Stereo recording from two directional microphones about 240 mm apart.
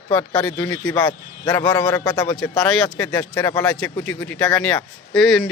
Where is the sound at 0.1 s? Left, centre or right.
Centre.